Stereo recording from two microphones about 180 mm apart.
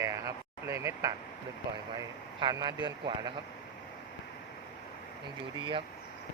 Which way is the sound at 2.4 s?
25° right (ahead or behind).